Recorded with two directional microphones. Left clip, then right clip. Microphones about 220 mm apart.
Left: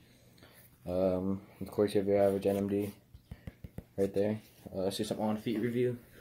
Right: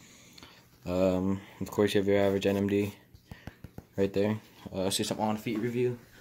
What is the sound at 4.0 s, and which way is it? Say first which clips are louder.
Speech: right 3 dB; 40° right (ahead or behind).